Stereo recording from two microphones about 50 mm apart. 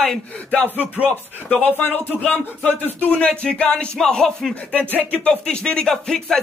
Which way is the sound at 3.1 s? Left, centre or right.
Left.